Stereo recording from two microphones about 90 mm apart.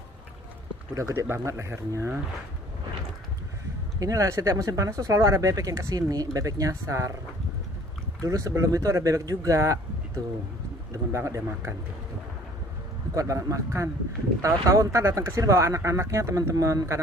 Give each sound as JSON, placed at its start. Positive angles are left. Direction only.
{"t": 0.9, "sound": "speech", "side_deg": -35}
{"t": 4.0, "sound": "speech", "side_deg": -35}
{"t": 8.2, "sound": "speech", "side_deg": -40}
{"t": 13.1, "sound": "speech", "side_deg": -40}